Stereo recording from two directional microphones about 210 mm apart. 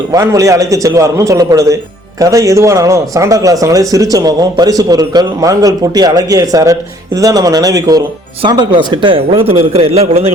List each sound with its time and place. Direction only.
0.1 s a man's voice: 15° right (ahead or behind)